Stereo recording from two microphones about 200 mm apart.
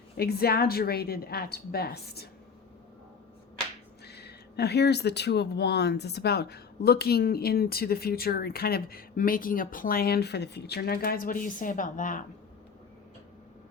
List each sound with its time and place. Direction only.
0.2 s speech: 50° left (ahead or behind)
4.0 s speech: 55° left (ahead or behind)